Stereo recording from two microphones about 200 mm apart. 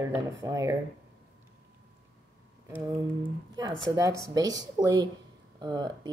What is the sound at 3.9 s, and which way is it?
Speech, 15° right (ahead or behind).